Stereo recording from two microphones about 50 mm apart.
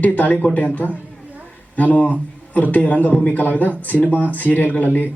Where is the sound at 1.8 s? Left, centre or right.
Left.